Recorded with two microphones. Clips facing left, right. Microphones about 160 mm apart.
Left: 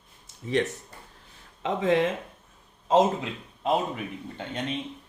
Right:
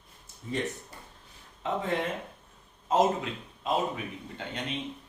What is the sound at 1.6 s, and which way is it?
Speech, 90° left.